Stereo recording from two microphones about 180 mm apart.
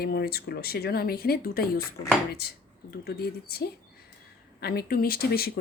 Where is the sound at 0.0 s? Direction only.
60° left (ahead or behind).